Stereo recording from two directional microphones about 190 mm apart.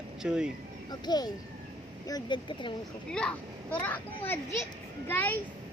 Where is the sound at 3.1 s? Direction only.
5° left (ahead or behind).